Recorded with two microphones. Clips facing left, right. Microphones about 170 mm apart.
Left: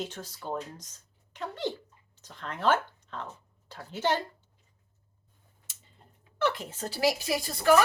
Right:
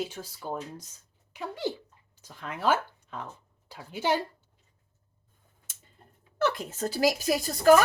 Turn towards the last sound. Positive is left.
turn(degrees=-45)  # may be behind; listen again after turning